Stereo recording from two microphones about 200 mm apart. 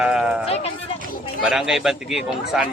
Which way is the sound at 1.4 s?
Centre (ahead or behind).